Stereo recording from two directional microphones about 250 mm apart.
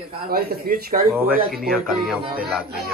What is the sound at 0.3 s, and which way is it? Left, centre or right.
Speech, right.